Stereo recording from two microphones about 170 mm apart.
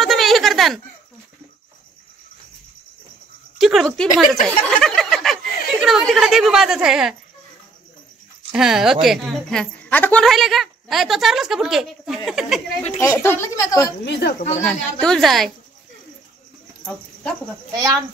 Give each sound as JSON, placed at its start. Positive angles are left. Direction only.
{"t": 0.0, "sound": "a sound", "side_deg": 0}
{"t": 3.5, "sound": "speech", "side_deg": 0}
{"t": 8.5, "sound": "speech", "side_deg": -5}
{"t": 13.0, "sound": "a woman's voice", "side_deg": 15}
{"t": 14.6, "sound": "speech", "side_deg": 5}
{"t": 16.8, "sound": "speech", "side_deg": 5}
{"t": 17.7, "sound": "speech", "side_deg": -20}